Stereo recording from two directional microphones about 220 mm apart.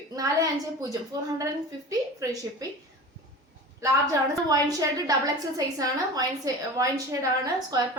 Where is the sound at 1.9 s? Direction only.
15° right (ahead or behind).